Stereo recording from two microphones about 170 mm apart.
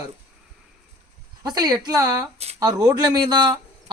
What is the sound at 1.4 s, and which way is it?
Speech, 25° right (ahead or behind).